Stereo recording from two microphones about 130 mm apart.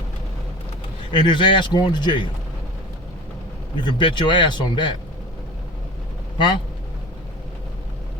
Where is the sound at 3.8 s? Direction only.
40° left (ahead or behind).